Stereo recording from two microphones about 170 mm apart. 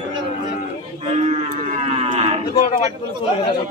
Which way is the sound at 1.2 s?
40° right (ahead or behind).